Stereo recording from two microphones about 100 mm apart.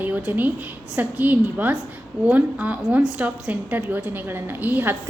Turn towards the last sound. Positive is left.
turn(degrees=-20)  # may be behind; listen again after turning